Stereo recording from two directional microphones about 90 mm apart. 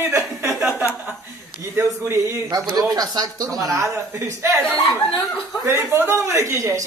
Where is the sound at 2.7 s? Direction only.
50° right (ahead or behind); by 4.6 s 30° right (ahead or behind).